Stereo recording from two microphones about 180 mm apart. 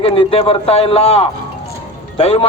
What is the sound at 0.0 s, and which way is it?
A man's voice, 30° left (ahead or behind).